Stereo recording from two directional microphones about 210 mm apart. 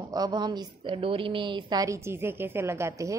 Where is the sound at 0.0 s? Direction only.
20° right (ahead or behind).